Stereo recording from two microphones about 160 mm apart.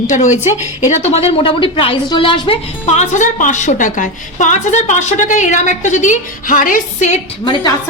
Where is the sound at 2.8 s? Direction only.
45° left (ahead or behind).